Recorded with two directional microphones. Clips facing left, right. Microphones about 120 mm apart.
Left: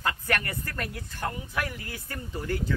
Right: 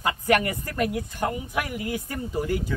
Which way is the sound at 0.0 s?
15° right (ahead or behind).